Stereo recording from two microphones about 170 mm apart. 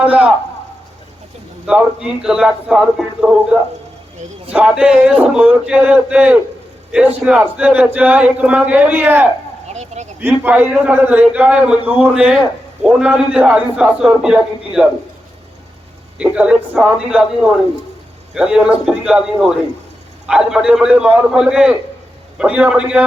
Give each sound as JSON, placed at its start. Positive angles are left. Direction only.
{"t": 0.0, "sound": "a man's voice", "side_deg": -5}
{"t": 1.6, "sound": "a man's voice", "side_deg": -5}
{"t": 9.7, "sound": "a sound", "side_deg": -40}
{"t": 10.2, "sound": "a man's voice", "side_deg": -10}
{"t": 16.1, "sound": "a man's voice", "side_deg": -5}